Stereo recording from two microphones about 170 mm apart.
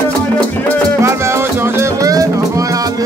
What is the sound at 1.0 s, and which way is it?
Music, 15° right (ahead or behind).